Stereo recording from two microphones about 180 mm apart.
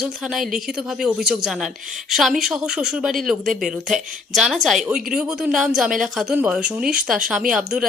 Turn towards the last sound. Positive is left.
turn(degrees=-5)  # may be behind; listen again after turning